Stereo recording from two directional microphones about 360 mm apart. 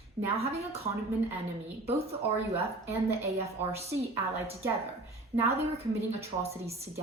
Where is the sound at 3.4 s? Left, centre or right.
Centre.